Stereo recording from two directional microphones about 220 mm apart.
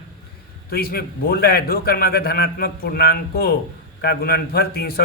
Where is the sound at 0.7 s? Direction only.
45° left (ahead or behind).